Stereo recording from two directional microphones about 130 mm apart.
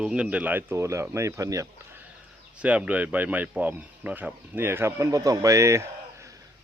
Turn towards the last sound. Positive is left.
turn(degrees=-20)  # may be behind; listen again after turning